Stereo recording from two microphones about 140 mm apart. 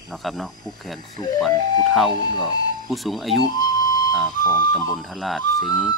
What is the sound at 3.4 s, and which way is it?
Music, 30° left (ahead or behind).